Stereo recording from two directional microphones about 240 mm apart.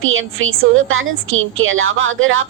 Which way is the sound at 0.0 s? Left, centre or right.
Right.